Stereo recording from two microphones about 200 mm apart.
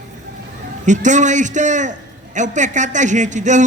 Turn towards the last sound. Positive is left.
turn(degrees=-35)  # may be behind; listen again after turning